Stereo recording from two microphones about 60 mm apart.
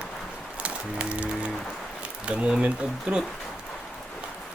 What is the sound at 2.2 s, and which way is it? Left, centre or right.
Speech, centre.